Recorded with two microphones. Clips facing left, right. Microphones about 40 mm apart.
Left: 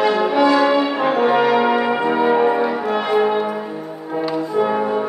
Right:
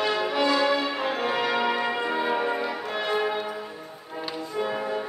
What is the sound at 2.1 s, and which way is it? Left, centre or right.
Music, left.